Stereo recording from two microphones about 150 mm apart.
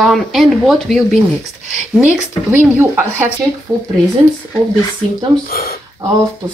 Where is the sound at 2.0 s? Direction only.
10° right (ahead or behind).